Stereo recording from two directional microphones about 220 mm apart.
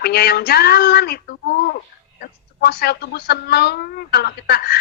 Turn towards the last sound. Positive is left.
turn(degrees=45)  # may be behind; listen again after turning